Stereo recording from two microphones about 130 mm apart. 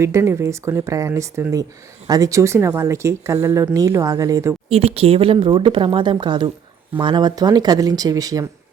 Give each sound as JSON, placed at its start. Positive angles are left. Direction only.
{"t": 0.0, "sound": "speech", "side_deg": -20}
{"t": 4.7, "sound": "speech", "side_deg": -50}